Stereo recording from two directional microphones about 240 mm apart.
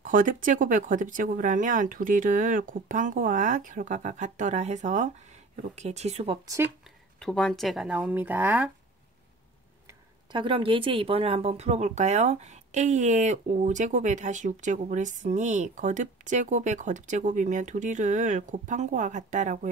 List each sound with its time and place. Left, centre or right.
0.0 s speech: right; by 6.7 s centre
7.2 s speech: centre
9.8 s speech: centre